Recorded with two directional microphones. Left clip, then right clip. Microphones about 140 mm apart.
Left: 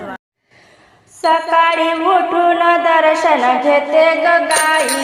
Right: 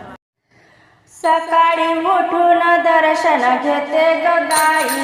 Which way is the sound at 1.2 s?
15° left (ahead or behind).